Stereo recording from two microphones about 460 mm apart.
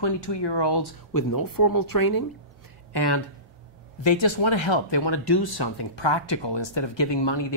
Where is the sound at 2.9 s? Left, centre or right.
Left.